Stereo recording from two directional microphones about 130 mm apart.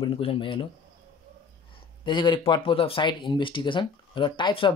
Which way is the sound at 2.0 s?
35° left (ahead or behind).